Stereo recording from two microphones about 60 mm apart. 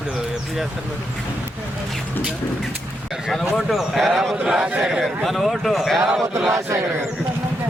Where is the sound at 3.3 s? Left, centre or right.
Centre.